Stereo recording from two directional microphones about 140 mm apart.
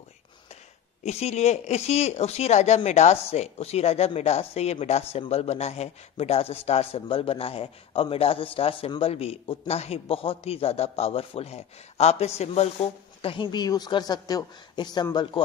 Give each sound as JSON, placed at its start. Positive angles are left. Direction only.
{"t": 1.0, "sound": "a man's voice", "side_deg": 50}